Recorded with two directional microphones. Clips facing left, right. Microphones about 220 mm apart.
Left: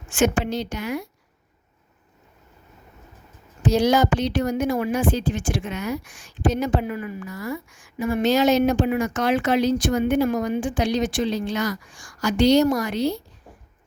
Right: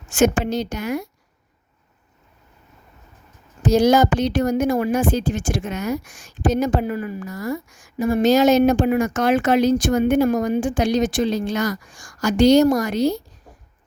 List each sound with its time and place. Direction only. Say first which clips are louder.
0.1 s speech: right 3 dB; 40° right (ahead or behind)
3.6 s speech: right 4 dB; 45° right (ahead or behind)